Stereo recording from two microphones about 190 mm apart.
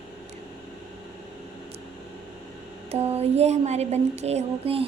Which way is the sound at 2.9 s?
35° right (ahead or behind).